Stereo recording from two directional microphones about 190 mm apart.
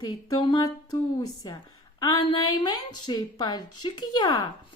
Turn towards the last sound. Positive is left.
turn(degrees=20)  # may be behind; listen again after turning